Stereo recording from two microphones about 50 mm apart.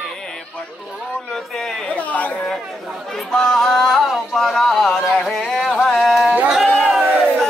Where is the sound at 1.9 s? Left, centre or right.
Left.